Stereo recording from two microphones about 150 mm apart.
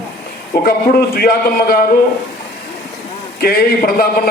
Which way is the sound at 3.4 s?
85° left.